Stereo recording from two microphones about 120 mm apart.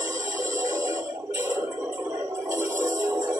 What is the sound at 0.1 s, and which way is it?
Music, 90° right.